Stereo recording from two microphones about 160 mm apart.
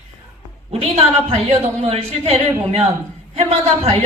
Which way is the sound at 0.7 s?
40° right (ahead or behind).